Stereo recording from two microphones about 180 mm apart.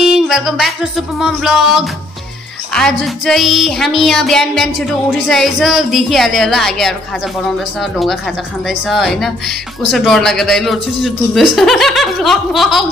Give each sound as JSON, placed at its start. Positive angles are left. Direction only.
{"t": 0.0, "sound": "a man's voice", "side_deg": -5}
{"t": 8.6, "sound": "a man's voice", "side_deg": 0}